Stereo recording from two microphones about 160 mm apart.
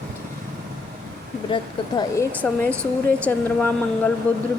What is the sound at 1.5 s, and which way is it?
Speech, 25° left (ahead or behind).